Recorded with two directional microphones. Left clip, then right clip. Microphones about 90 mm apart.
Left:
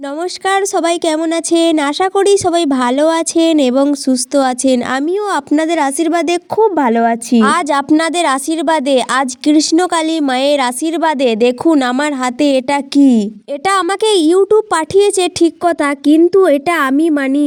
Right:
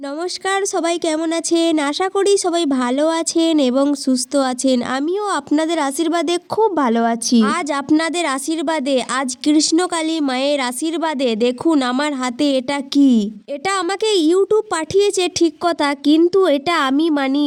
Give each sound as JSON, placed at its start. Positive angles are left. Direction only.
{"t": 0.4, "sound": "a woman's voice", "side_deg": 45}
{"t": 7.4, "sound": "a woman's voice", "side_deg": 50}